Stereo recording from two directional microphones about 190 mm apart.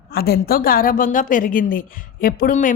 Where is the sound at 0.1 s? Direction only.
55° left (ahead or behind).